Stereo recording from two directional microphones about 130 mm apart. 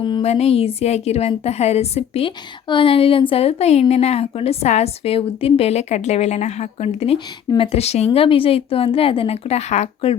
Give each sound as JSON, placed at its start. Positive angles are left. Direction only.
{"t": 0.2, "sound": "a woman's voice", "side_deg": 50}